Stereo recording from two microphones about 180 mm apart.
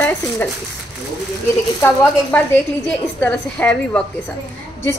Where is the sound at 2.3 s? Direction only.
10° left (ahead or behind).